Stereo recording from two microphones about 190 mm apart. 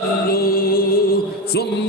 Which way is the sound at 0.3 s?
50° left (ahead or behind).